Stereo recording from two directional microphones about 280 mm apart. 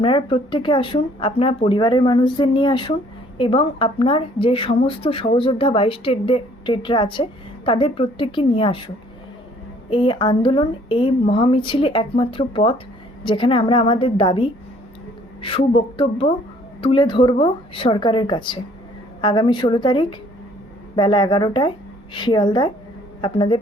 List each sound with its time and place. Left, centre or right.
0.0 s speech: centre
9.9 s speech: centre